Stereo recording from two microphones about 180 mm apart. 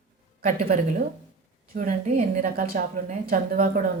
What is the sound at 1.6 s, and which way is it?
A woman's voice, 50° right (ahead or behind).